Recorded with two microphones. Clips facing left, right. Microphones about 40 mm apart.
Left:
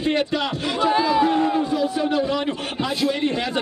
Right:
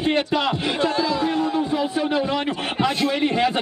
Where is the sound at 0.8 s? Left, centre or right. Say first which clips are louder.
Left 5 dB; centre.